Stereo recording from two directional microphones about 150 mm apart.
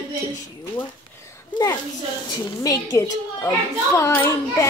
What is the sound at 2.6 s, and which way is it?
A child's voice, 25° left (ahead or behind).